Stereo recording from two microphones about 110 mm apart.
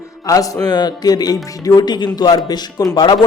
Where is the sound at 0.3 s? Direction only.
30° left (ahead or behind).